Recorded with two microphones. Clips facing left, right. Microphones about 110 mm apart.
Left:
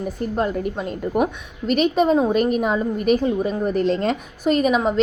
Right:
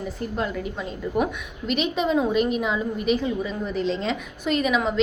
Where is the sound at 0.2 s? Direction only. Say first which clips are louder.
Left 6 dB; 40° left (ahead or behind).